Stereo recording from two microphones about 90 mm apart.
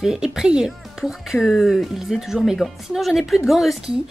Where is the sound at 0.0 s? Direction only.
5° right (ahead or behind).